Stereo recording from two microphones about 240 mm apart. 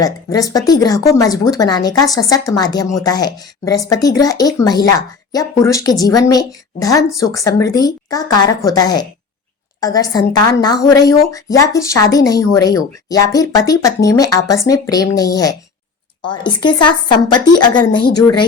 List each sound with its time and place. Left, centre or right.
0.0 s a woman's voice: centre